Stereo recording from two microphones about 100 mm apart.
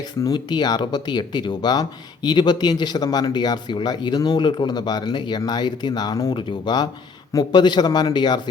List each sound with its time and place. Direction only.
0.3 s speech: 45° left (ahead or behind)